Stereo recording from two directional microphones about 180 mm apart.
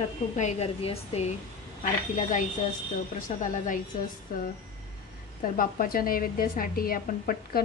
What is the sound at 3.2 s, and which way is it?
Speech, 45° left (ahead or behind).